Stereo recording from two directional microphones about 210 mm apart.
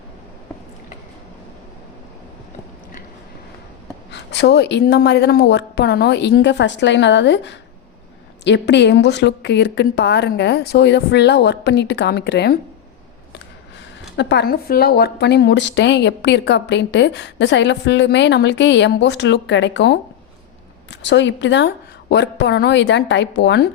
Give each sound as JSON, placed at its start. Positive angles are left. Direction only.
{"t": 4.1, "sound": "a woman's voice", "side_deg": 55}
{"t": 14.2, "sound": "a woman's voice", "side_deg": 55}